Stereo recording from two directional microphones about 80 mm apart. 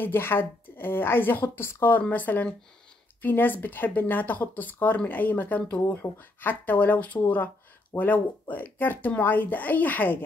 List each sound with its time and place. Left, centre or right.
0.0 s speech: left